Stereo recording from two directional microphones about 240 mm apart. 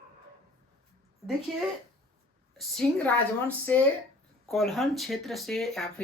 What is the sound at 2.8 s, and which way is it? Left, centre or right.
Speech, centre.